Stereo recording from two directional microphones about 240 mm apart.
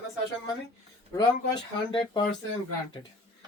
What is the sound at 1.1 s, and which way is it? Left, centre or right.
Speech, centre.